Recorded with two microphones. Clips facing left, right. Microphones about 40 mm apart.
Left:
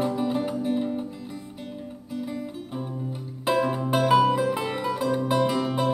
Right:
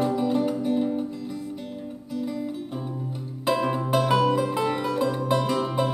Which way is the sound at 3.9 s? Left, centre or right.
Centre.